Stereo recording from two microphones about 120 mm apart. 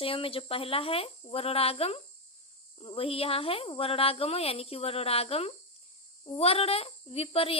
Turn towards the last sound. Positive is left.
turn(degrees=50)  # may be behind; listen again after turning